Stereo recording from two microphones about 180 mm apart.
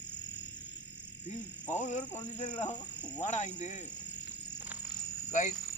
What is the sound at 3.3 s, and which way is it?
Speech, 45° left (ahead or behind).